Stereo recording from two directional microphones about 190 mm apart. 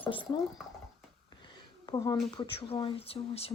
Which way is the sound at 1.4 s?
20° left (ahead or behind).